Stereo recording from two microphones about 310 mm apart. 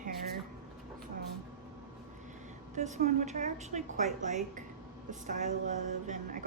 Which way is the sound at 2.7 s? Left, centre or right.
Right.